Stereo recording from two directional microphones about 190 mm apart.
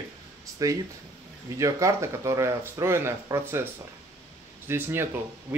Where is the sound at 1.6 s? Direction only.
15° right (ahead or behind).